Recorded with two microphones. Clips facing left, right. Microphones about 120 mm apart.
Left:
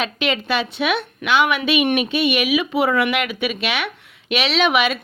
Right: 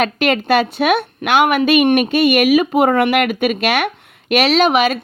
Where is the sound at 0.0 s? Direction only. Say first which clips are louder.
Right 6 dB; 50° right (ahead or behind).